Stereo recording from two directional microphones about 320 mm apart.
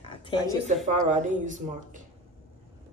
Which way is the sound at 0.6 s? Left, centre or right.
Right.